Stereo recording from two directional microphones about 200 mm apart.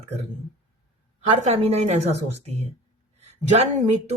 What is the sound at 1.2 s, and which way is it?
Speech, 35° right (ahead or behind).